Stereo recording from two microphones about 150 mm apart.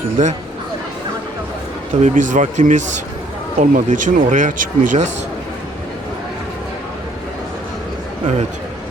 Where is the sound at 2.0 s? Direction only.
55° right (ahead or behind).